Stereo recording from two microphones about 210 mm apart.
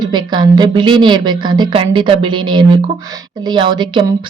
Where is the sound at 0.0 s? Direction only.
20° right (ahead or behind).